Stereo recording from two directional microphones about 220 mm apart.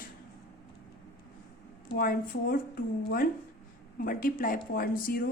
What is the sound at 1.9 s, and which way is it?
Speech, 45° left (ahead or behind).